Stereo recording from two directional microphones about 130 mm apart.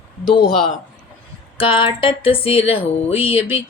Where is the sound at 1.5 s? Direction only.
40° left (ahead or behind).